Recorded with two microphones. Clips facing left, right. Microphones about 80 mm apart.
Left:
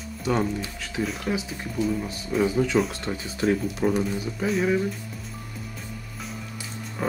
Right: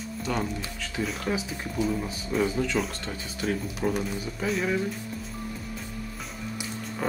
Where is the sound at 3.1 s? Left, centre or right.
Left.